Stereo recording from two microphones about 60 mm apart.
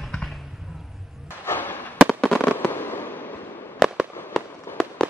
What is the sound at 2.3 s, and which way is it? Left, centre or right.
Fireworks, left.